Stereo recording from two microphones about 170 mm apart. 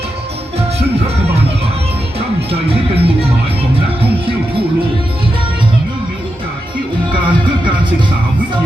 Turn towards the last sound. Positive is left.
turn(degrees=-30)  # may be behind; listen again after turning